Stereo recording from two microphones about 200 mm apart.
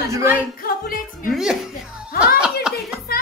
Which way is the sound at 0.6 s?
45° left (ahead or behind).